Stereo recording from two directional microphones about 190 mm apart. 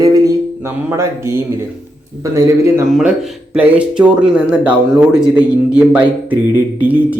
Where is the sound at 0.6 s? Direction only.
15° right (ahead or behind).